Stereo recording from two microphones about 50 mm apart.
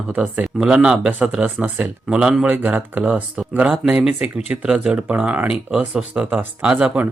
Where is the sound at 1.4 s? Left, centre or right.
Right.